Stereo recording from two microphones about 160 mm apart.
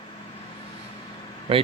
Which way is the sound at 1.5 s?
40° right (ahead or behind).